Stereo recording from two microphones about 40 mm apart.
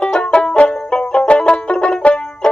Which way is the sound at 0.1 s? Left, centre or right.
Left.